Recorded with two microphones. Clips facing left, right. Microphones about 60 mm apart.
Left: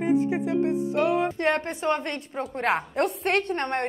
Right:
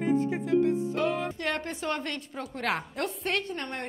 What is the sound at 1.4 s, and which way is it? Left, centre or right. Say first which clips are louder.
A woman's voice: left 7 dB; left.